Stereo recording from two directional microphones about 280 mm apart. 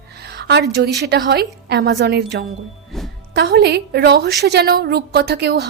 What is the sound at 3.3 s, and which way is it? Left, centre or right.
A woman's voice, right.